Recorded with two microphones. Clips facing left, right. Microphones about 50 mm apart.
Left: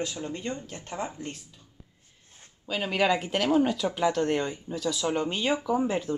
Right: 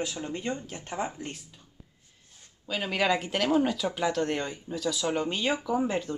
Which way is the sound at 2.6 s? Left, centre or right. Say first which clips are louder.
Left 2 dB; centre.